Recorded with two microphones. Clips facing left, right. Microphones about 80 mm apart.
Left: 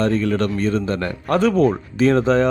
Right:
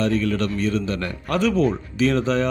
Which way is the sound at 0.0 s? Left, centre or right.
Left.